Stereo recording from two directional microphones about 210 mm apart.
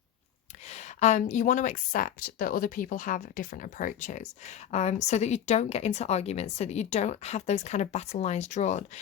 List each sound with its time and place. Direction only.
0.7 s speech: 35° left (ahead or behind)